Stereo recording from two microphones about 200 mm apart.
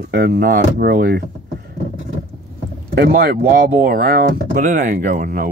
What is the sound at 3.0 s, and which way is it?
Speech, 50° right (ahead or behind).